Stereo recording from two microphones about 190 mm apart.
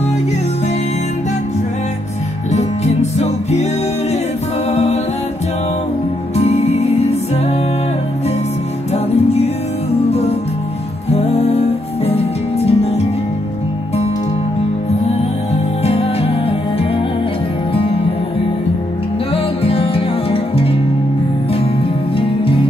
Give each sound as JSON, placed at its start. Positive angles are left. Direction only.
{"t": 2.5, "sound": "music", "side_deg": 35}
{"t": 6.3, "sound": "music", "side_deg": 35}
{"t": 10.0, "sound": "music", "side_deg": 35}
{"t": 15.0, "sound": "music", "side_deg": 35}
{"t": 17.7, "sound": "music", "side_deg": 30}
{"t": 19.3, "sound": "music", "side_deg": 30}
{"t": 22.1, "sound": "music", "side_deg": 30}